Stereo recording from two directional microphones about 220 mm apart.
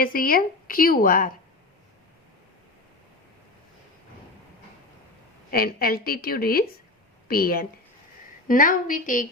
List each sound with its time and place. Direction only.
0.0 s a woman's voice: 40° left (ahead or behind)
5.5 s a woman's voice: 40° left (ahead or behind)